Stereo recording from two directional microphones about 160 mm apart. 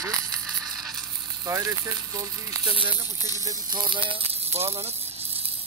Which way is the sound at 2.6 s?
30° right (ahead or behind).